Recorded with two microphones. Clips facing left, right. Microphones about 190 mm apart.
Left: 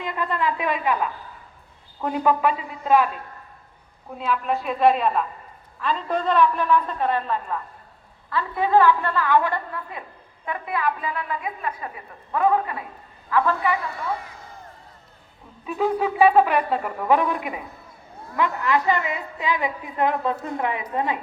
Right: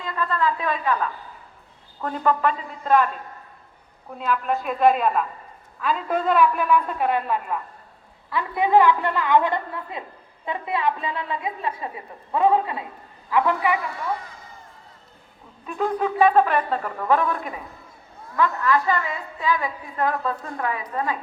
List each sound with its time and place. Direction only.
0.0 s a man's voice: 20° left (ahead or behind)
4.2 s a woman's voice: centre (ahead or behind); by 13.7 s 15° right (ahead or behind)
15.6 s a man's voice: 5° left (ahead or behind); by 21.2 s 20° left (ahead or behind)